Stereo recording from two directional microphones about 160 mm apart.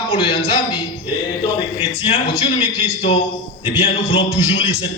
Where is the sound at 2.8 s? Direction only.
40° left (ahead or behind).